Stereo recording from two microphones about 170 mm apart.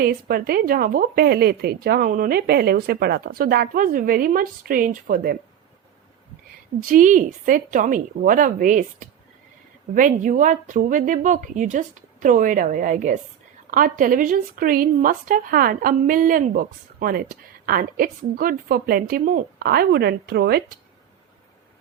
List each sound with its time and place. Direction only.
0.0 s speech: 60° right (ahead or behind)
6.8 s a woman's voice: 50° right (ahead or behind); by 20.6 s 70° right (ahead or behind)